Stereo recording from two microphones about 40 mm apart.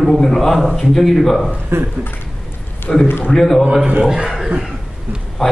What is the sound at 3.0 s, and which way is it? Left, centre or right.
Speech, left.